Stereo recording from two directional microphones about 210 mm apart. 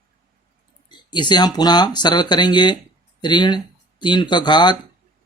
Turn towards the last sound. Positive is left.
turn(degrees=20)  # may be behind; listen again after turning